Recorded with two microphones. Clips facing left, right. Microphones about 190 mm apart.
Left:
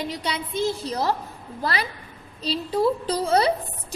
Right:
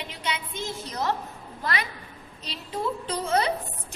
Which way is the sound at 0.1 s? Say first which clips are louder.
Left 5 dB; 35° left (ahead or behind).